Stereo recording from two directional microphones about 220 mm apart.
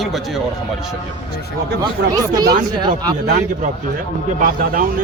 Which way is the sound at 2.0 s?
45° right (ahead or behind).